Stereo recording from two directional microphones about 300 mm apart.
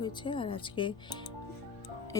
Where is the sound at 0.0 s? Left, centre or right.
Centre.